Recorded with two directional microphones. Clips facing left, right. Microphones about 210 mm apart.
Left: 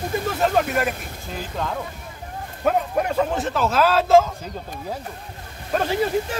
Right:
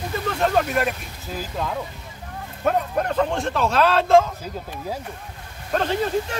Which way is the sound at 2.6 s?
5° left (ahead or behind).